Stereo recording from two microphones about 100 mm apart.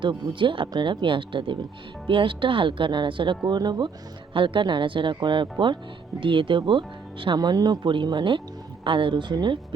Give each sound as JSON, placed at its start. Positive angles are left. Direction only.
{"t": 0.0, "sound": "speech", "side_deg": -50}
{"t": 4.4, "sound": "speech", "side_deg": -60}
{"t": 7.3, "sound": "speech", "side_deg": -40}